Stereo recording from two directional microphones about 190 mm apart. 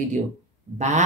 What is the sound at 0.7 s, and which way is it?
Speech, 40° right (ahead or behind).